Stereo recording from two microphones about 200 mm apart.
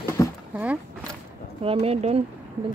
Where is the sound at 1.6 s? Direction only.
30° right (ahead or behind).